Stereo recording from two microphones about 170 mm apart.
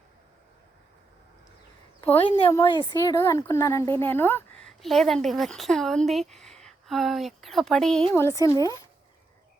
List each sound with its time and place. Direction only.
2.0 s speech: 10° left (ahead or behind)
2.5 s speech: 25° left (ahead or behind)
4.8 s a woman's voice: centre (ahead or behind)
8.1 s speech: 15° left (ahead or behind)